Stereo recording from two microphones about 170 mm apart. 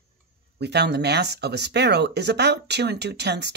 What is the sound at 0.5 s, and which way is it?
Speech, 85° right.